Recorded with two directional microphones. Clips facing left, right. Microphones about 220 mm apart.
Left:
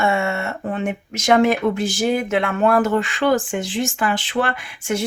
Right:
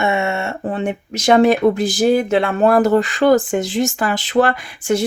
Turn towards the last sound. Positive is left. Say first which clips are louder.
# right 5 dB
turn(degrees=-35)  # may be behind; listen again after turning